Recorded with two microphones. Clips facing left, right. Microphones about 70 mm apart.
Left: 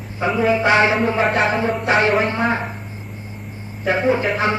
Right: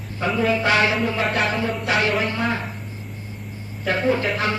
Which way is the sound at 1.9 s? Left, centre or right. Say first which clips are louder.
Left 5 dB; left.